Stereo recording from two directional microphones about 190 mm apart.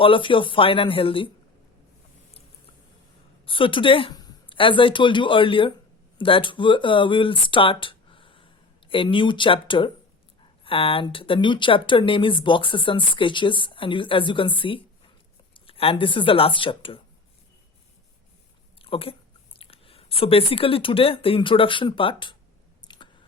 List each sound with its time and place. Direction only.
0.0 s speech: 25° left (ahead or behind)
3.4 s speech: 25° left (ahead or behind)
18.8 s a sound: 30° left (ahead or behind)
19.5 s speech: 30° left (ahead or behind)
22.8 s chewing: 20° left (ahead or behind)